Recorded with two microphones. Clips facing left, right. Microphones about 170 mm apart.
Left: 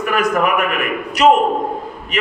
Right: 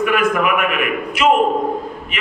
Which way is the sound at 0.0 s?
40° left (ahead or behind).